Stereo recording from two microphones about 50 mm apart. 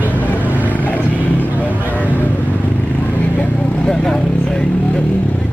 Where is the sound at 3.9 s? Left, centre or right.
Centre.